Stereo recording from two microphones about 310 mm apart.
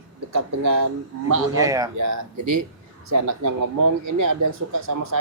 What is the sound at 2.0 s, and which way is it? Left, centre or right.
Speech, right.